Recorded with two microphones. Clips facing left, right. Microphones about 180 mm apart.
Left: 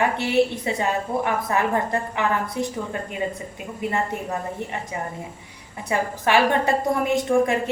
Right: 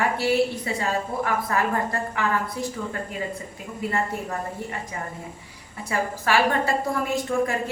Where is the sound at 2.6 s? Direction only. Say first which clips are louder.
Left 3 dB; 20° left (ahead or behind).